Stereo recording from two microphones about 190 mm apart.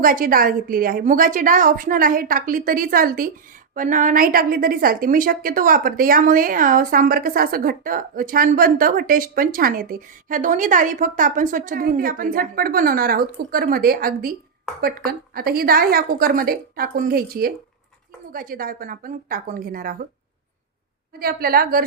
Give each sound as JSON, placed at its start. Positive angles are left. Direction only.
{"t": 0.0, "sound": "a woman's voice", "side_deg": -45}
{"t": 21.2, "sound": "a woman's voice", "side_deg": -50}